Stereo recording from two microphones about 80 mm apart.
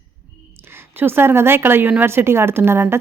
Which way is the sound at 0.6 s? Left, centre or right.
Right.